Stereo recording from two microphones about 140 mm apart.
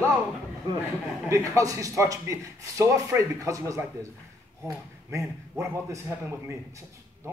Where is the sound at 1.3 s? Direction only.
20° right (ahead or behind).